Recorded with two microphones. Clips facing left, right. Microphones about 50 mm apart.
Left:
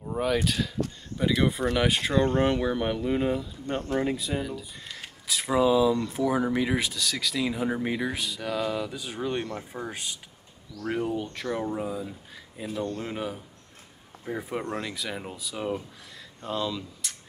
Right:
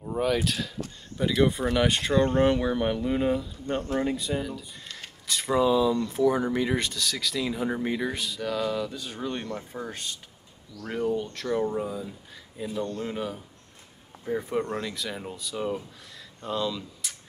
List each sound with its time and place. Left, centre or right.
0.0 s speech: centre